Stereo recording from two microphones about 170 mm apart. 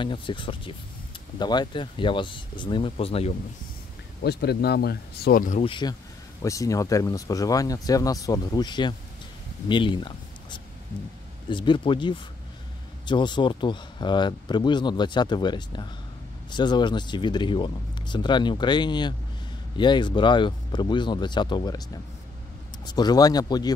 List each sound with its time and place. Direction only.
0.0 s speech: 30° left (ahead or behind)
4.2 s speech: 70° left (ahead or behind); by 5.6 s 55° left (ahead or behind)
5.6 s speech: 30° left (ahead or behind)